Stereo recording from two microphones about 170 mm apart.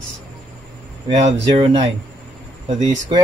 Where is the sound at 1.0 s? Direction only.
35° right (ahead or behind).